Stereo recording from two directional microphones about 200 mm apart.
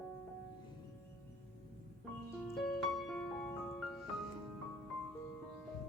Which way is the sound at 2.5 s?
Centre (ahead or behind).